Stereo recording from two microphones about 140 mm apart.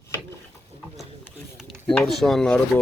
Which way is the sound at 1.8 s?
5° left (ahead or behind).